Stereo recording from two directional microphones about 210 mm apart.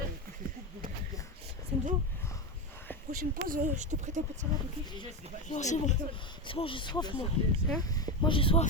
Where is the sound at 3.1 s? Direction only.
40° right (ahead or behind).